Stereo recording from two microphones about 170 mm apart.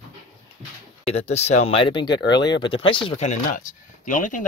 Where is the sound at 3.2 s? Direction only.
45° left (ahead or behind).